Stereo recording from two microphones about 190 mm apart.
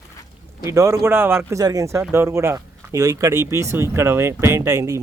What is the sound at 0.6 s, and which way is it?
Speech, 15° right (ahead or behind).